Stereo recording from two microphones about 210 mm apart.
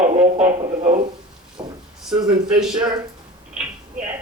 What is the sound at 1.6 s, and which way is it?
Speech, 15° right (ahead or behind).